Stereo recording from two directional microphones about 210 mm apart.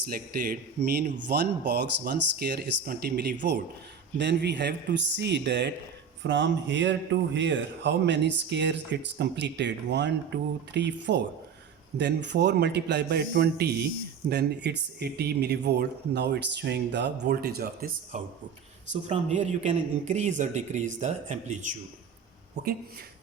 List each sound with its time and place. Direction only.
0.1 s speech: 45° right (ahead or behind)
19.0 s a man's voice: 35° right (ahead or behind)